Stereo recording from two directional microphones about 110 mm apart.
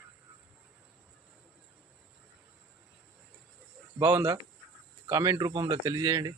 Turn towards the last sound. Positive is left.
turn(degrees=-35)  # may be behind; listen again after turning